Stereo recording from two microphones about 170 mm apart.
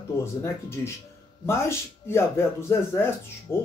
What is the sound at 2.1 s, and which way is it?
Speech, 15° left (ahead or behind).